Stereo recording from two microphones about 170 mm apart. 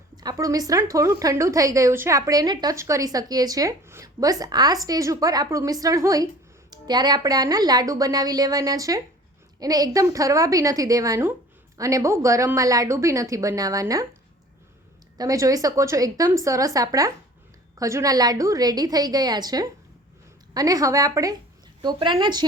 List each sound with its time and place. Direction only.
0.2 s speech: 20° right (ahead or behind)
15.2 s speech: 20° right (ahead or behind)